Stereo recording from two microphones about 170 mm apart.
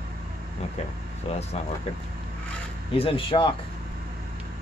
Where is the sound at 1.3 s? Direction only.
40° left (ahead or behind).